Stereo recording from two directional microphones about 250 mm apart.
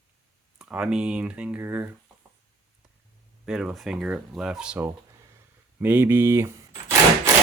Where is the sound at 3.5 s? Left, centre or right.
Centre.